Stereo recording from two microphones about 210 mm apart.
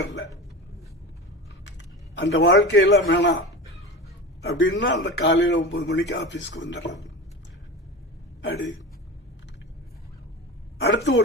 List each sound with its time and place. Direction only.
0.0 s a sound: 60° left (ahead or behind)
2.1 s a man's voice: 50° left (ahead or behind)
4.4 s a man's voice: 60° left (ahead or behind)
8.4 s speech: 60° left (ahead or behind)
10.8 s a woman's voice: 55° left (ahead or behind)